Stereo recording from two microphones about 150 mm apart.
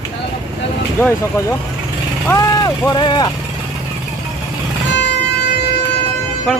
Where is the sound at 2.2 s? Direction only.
15° left (ahead or behind).